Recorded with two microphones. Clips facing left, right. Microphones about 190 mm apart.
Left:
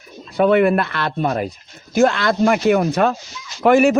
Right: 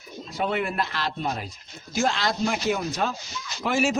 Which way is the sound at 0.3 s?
60° left (ahead or behind).